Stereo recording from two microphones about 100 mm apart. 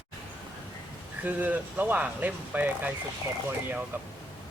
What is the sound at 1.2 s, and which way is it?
Speech, 15° right (ahead or behind).